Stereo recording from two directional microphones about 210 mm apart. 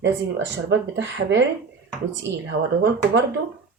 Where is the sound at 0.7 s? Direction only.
60° right (ahead or behind).